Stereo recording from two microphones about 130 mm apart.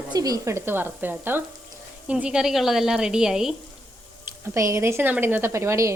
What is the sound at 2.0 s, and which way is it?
A woman's voice, 10° right (ahead or behind).